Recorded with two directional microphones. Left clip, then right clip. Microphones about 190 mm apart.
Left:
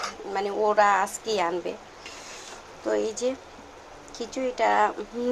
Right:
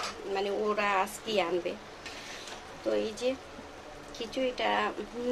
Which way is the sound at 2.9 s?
30° left (ahead or behind).